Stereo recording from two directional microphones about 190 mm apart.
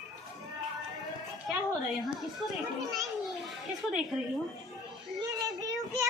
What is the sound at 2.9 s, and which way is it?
Speech, centre (ahead or behind).